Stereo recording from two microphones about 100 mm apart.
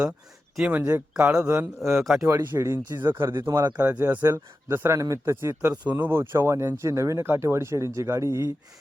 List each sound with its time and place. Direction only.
0.7 s speech: 20° right (ahead or behind)
1.1 s a man's voice: 10° right (ahead or behind)
1.5 s speech: 25° right (ahead or behind)
3.7 s speech: 20° right (ahead or behind)